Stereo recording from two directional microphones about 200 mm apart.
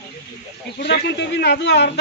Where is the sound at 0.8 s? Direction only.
60° left (ahead or behind).